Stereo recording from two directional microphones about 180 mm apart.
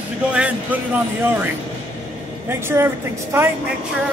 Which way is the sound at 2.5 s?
15° right (ahead or behind).